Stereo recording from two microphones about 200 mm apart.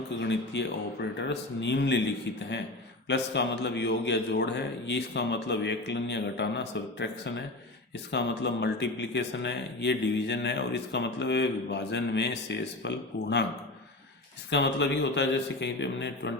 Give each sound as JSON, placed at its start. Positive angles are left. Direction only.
{"t": 0.2, "sound": "speech", "side_deg": 60}
{"t": 14.5, "sound": "speech", "side_deg": 60}